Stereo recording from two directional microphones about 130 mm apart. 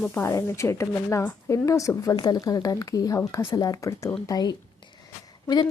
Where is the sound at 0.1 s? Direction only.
20° left (ahead or behind).